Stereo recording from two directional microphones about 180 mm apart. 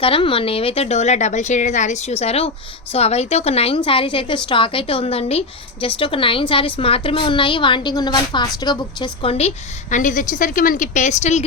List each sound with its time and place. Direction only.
0.0 s a woman's voice: 30° left (ahead or behind)
9.9 s a woman's voice: 45° left (ahead or behind)